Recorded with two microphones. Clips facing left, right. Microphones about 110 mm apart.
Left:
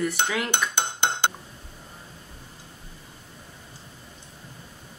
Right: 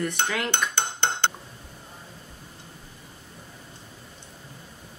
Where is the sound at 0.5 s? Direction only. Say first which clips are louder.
Left 1 dB; 15° left (ahead or behind).